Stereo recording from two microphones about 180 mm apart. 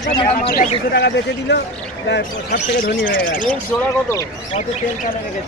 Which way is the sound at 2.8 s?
50° left (ahead or behind).